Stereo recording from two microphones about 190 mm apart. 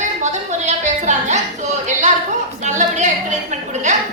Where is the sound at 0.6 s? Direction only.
40° right (ahead or behind).